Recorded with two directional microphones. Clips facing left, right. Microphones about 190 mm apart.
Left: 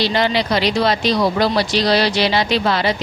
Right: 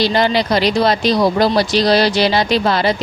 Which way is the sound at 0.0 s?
40° right (ahead or behind).